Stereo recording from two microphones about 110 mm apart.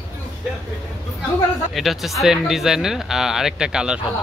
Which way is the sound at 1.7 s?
Centre (ahead or behind).